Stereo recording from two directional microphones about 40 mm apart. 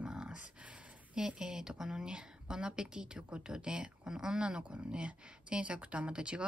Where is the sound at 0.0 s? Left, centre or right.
Right.